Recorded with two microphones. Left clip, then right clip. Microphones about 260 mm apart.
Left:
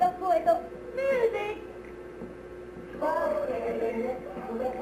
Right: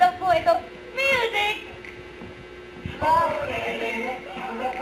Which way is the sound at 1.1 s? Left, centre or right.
Centre.